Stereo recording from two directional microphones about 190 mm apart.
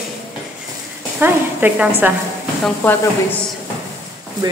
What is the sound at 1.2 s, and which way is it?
Speech, 10° right (ahead or behind).